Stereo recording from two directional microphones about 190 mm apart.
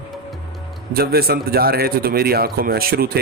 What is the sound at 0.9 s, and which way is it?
A man's voice, 55° right (ahead or behind).